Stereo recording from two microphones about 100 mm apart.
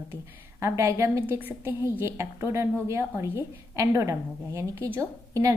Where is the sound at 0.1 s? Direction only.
30° right (ahead or behind).